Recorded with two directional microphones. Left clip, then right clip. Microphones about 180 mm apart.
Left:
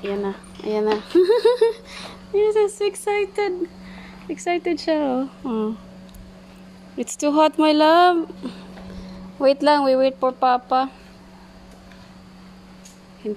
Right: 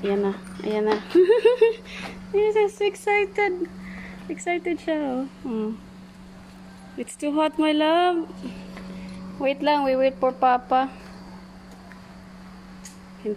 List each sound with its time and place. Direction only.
0.1 s speech: 10° left (ahead or behind)
4.3 s a woman's voice: 35° left (ahead or behind)
7.0 s a woman's voice: 35° left (ahead or behind)
9.4 s speech: 35° left (ahead or behind)